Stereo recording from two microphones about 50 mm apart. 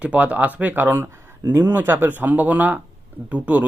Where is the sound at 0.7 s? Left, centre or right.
Right.